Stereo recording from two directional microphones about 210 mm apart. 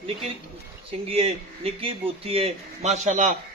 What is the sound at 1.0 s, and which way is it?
A man's voice, 25° right (ahead or behind).